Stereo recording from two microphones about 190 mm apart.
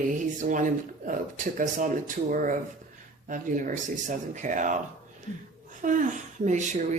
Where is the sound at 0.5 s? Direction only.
45° right (ahead or behind).